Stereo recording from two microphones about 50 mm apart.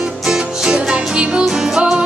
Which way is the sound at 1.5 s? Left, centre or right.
Centre.